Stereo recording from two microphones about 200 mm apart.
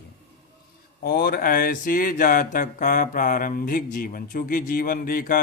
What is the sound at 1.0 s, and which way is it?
Speech, 50° left (ahead or behind).